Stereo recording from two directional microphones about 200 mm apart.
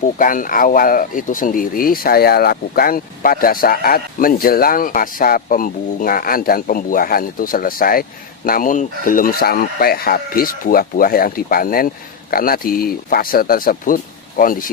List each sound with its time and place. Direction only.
0.2 s speech: 45° left (ahead or behind)